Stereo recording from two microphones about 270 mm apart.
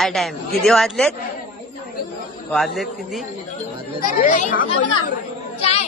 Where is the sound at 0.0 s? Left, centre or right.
Centre.